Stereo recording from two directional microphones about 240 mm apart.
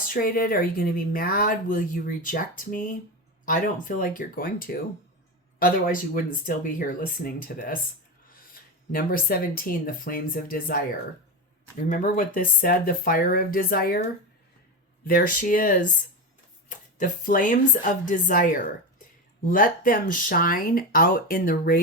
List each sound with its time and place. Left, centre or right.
0.1 s speech: left
11.9 s speech: left
15.0 s speech: left